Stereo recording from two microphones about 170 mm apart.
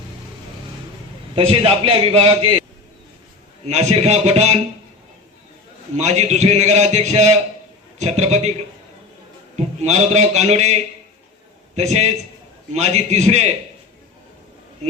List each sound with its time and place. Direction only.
1.4 s a man's voice: 35° right (ahead or behind)
3.7 s a man's voice: 40° right (ahead or behind)
6.0 s a man's voice: 40° right (ahead or behind)
9.8 s a man's voice: 40° right (ahead or behind)
11.8 s a man's voice: 40° right (ahead or behind)